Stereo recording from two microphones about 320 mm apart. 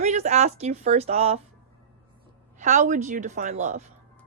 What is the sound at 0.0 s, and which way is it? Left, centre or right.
Speech, right.